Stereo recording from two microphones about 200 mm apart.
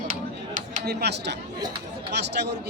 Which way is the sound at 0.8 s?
55° right (ahead or behind).